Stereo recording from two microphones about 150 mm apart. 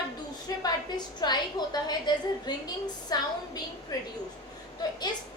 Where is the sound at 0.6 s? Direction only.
30° left (ahead or behind).